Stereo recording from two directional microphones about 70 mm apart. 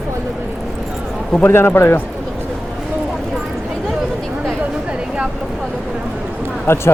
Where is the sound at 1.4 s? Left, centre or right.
Left.